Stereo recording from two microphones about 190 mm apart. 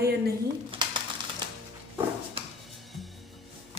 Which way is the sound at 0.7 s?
25° right (ahead or behind).